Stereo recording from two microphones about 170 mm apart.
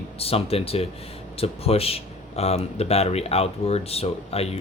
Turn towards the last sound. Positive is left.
turn(degrees=35)  # may be behind; listen again after turning